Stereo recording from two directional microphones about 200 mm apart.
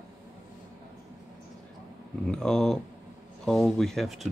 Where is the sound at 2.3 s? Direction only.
5° left (ahead or behind).